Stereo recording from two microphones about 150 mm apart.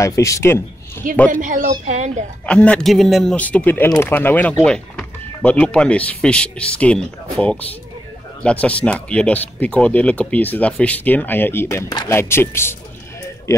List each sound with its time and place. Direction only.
0.0 s a man's voice: 20° left (ahead or behind)
1.3 s speech: 60° right (ahead or behind)
2.4 s a man's voice: 5° left (ahead or behind)